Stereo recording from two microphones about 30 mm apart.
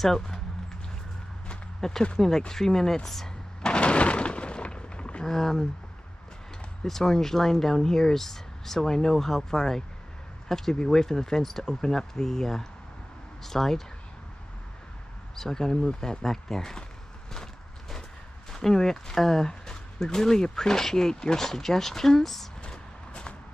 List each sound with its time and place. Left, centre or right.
0.0 s speech: centre
1.8 s speech: centre
3.6 s a sound: left
5.2 s speech: centre
6.8 s speech: centre
15.3 s speech: centre
18.5 s speech: centre
22.7 s vehicle: left